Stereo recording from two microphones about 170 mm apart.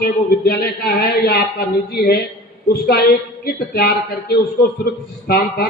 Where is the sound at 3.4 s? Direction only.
65° left (ahead or behind).